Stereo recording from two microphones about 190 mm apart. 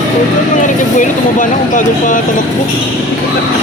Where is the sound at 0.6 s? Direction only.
45° left (ahead or behind).